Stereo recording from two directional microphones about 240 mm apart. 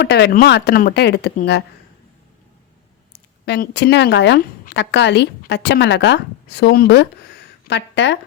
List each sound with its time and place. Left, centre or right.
0.0 s speech: left
3.1 s speech: left